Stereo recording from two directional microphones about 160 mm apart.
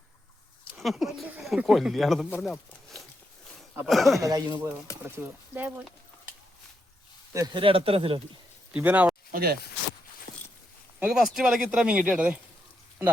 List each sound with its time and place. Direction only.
0.8 s speech: centre (ahead or behind)
2.4 s a sound: centre (ahead or behind)
3.8 s speech: centre (ahead or behind)
4.2 s speech: 25° right (ahead or behind)
5.1 s speech: 15° right (ahead or behind)
7.3 s speech: 25° right (ahead or behind)
8.7 s speech: 10° right (ahead or behind)
9.3 s speech: 70° right (ahead or behind)
10.3 s a sound: 65° left (ahead or behind)
11.0 s speech: 5° right (ahead or behind)